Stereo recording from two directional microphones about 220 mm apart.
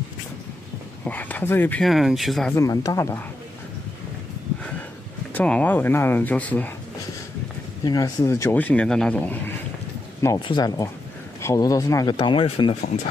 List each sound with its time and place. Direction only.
1.0 s speech: 5° left (ahead or behind)
2.5 s speech: 15° left (ahead or behind)
5.3 s speech: 5° left (ahead or behind)
7.8 s speech: 15° left (ahead or behind)
10.2 s speech: 20° left (ahead or behind)